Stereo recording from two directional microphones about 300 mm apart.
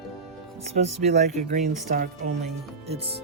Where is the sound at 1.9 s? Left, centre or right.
Right.